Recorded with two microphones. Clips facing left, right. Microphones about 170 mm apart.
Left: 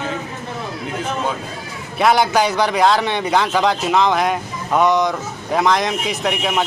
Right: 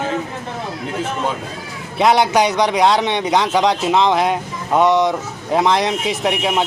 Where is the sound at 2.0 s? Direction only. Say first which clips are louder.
Right 1 dB; 25° right (ahead or behind).